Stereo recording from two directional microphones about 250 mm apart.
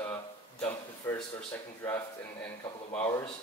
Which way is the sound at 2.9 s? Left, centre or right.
Left.